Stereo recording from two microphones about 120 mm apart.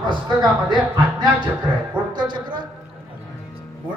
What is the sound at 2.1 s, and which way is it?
Speech, 40° right (ahead or behind).